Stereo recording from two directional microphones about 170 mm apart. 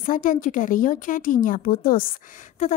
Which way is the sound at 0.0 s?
50° left (ahead or behind).